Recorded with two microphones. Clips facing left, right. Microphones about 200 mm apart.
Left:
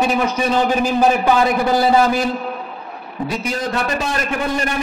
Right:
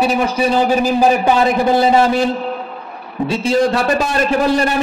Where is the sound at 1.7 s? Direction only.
25° right (ahead or behind).